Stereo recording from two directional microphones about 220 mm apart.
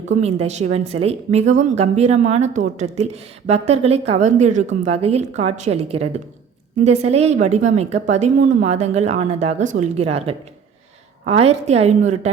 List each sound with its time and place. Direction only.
0.1 s speech: 30° right (ahead or behind)